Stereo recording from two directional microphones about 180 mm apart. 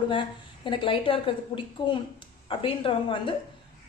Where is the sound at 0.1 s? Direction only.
30° left (ahead or behind).